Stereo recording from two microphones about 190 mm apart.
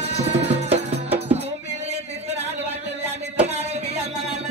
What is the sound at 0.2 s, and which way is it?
Music, 35° right (ahead or behind).